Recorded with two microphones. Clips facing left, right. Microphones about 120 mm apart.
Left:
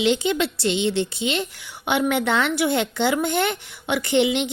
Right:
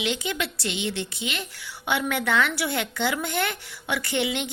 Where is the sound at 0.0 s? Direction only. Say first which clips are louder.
Left 8 dB; 30° left (ahead or behind).